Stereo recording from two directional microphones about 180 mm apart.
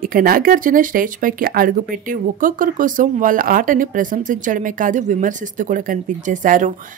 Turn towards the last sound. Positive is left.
turn(degrees=-45)  # may be behind; listen again after turning